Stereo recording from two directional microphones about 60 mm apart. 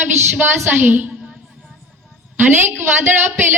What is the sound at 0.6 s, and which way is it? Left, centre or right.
Speech, right.